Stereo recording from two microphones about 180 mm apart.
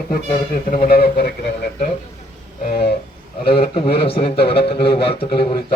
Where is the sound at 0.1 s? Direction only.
55° left (ahead or behind).